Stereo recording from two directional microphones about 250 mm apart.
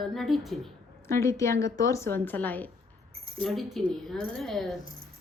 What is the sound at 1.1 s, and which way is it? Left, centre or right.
A woman's voice, centre.